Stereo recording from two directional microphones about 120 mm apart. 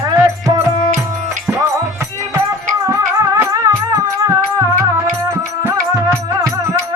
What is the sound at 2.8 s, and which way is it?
Music, 25° right (ahead or behind).